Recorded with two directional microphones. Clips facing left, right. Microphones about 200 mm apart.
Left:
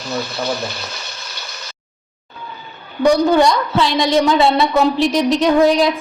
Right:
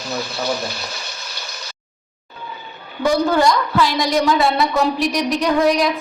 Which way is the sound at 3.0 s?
20° left (ahead or behind).